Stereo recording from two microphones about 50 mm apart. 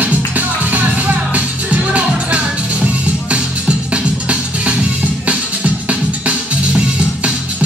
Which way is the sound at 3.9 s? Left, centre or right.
Right.